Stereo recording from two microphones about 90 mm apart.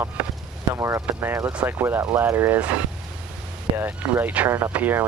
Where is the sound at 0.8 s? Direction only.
35° right (ahead or behind).